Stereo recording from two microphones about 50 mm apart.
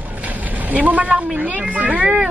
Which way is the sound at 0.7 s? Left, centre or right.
Right.